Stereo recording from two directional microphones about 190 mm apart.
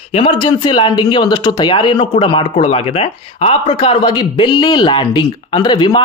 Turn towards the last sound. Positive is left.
turn(degrees=25)  # may be behind; listen again after turning